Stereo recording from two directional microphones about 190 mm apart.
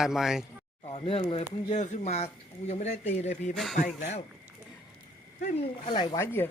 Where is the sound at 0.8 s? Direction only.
30° left (ahead or behind).